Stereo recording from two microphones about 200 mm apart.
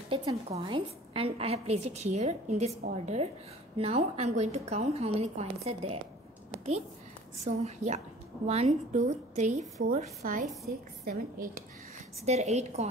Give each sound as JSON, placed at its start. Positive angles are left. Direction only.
{"t": 0.1, "sound": "a woman's voice", "side_deg": -25}
{"t": 3.7, "sound": "a woman's voice", "side_deg": -30}
{"t": 7.4, "sound": "a woman's voice", "side_deg": -35}
{"t": 12.3, "sound": "a woman's voice", "side_deg": -35}